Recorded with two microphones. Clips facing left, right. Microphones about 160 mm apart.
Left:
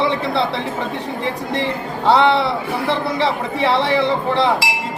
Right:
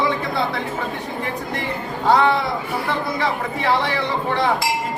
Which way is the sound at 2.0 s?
25° left (ahead or behind).